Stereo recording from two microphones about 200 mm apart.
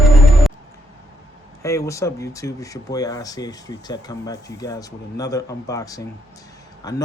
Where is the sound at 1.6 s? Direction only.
15° left (ahead or behind).